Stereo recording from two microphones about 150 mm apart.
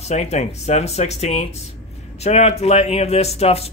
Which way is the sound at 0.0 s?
50° left (ahead or behind).